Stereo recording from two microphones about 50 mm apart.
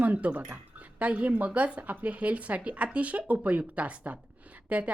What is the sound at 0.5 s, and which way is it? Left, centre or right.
A woman's voice, right.